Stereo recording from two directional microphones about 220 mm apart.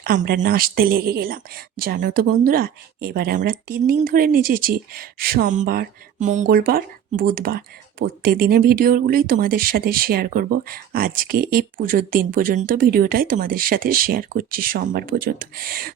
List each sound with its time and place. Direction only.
0.0 s speech: 40° right (ahead or behind)